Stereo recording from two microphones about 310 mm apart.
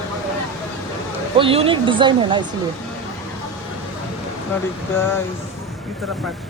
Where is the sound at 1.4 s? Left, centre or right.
Centre.